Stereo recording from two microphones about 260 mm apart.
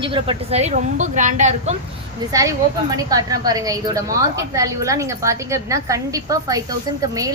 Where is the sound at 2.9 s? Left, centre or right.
Centre.